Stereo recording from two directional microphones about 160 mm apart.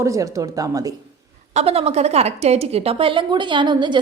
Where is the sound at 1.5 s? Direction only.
40° right (ahead or behind).